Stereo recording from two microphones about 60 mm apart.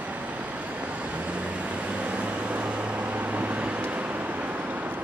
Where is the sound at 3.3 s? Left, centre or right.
Right.